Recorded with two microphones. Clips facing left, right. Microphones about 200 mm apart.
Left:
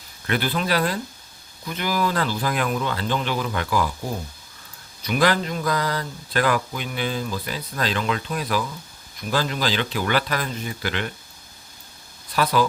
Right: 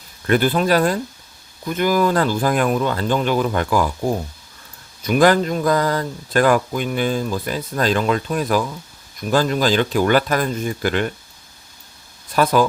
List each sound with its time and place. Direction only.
0.3 s speech: 45° right (ahead or behind)
5.0 s speech: 45° right (ahead or behind)
12.4 s speech: 45° right (ahead or behind)